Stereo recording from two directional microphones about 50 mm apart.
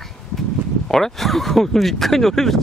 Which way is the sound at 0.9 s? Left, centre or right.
Centre.